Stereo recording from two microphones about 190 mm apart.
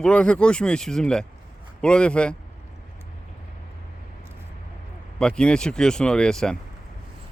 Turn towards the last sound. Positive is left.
turn(degrees=5)  # may be behind; listen again after turning